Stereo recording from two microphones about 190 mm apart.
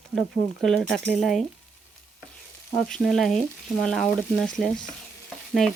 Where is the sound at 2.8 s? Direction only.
5° left (ahead or behind).